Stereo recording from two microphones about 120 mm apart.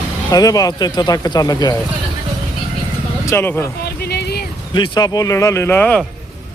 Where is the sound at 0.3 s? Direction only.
30° left (ahead or behind).